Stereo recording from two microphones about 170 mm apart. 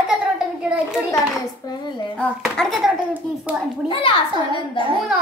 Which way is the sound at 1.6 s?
25° left (ahead or behind).